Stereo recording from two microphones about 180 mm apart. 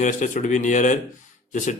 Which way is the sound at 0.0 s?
40° left (ahead or behind).